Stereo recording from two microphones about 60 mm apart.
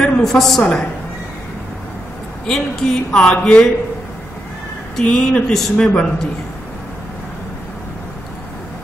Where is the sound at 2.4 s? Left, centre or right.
Centre.